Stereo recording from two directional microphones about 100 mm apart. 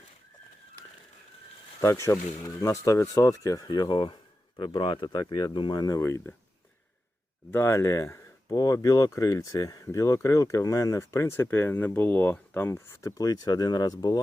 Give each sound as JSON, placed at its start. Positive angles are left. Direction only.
{"t": 1.8, "sound": "speech", "side_deg": 30}
{"t": 3.7, "sound": "speech", "side_deg": 50}
{"t": 7.5, "sound": "speech", "side_deg": 25}